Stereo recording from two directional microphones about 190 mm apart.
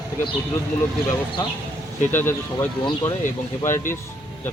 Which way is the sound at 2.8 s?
25° left (ahead or behind).